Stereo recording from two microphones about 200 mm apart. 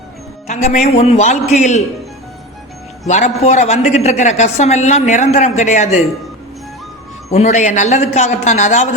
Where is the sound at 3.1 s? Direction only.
35° left (ahead or behind).